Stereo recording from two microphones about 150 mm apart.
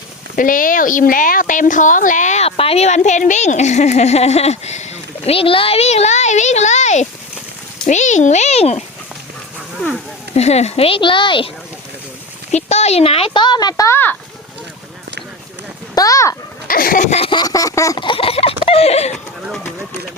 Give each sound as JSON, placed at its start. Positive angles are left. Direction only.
{"t": 0.3, "sound": "speech", "side_deg": 65}
{"t": 10.3, "sound": "speech", "side_deg": 45}
{"t": 12.5, "sound": "speech", "side_deg": 50}
{"t": 16.0, "sound": "speech", "side_deg": 20}
{"t": 16.6, "sound": "a sound", "side_deg": 75}
{"t": 17.2, "sound": "speech", "side_deg": 30}